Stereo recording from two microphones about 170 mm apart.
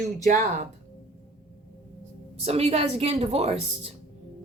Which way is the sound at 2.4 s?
35° right (ahead or behind).